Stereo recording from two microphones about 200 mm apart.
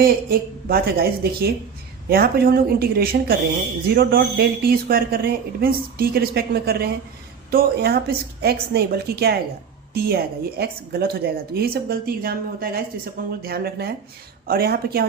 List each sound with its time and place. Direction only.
0.0 s a woman's voice: 50° right (ahead or behind)